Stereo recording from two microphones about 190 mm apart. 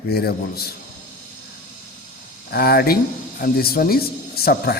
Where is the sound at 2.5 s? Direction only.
55° left (ahead or behind).